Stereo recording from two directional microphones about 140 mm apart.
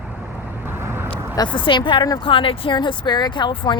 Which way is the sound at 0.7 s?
15° right (ahead or behind).